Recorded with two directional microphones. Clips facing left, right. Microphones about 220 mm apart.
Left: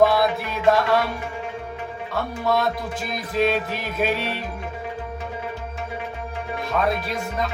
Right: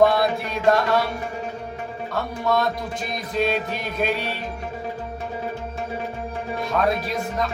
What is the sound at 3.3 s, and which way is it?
Music, centre (ahead or behind).